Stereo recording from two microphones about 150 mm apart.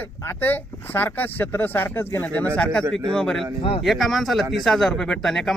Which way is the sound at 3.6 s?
35° left (ahead or behind).